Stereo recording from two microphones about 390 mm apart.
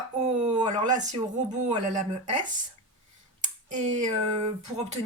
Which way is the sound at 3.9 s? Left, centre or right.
Centre.